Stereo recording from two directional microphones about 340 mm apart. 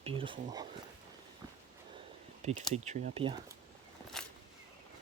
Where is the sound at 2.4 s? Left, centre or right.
Centre.